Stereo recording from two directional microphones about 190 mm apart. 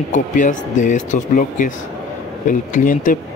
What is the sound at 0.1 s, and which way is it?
A man's voice, 40° left (ahead or behind).